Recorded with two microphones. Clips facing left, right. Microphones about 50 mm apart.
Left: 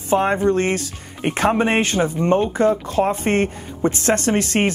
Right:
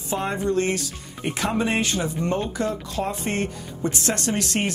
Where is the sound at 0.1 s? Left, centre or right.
Left.